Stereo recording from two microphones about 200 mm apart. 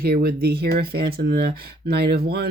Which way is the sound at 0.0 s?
50° right (ahead or behind).